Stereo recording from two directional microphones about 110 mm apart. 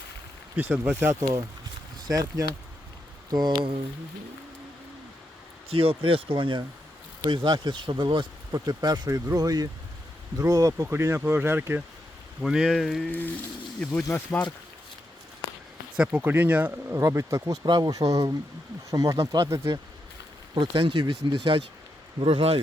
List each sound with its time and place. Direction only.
0.5 s speech: 15° right (ahead or behind)
2.0 s speech: 35° right (ahead or behind)
5.6 s speech: 60° right (ahead or behind); by 11.8 s 20° right (ahead or behind)
12.4 s speech: centre (ahead or behind)
13.1 s speech: 15° left (ahead or behind)
16.0 s speech: 15° right (ahead or behind)
20.7 s speech: 55° right (ahead or behind)
22.2 s speech: 60° right (ahead or behind)